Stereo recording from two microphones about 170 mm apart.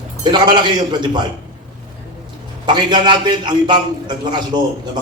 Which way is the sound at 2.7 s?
25° right (ahead or behind).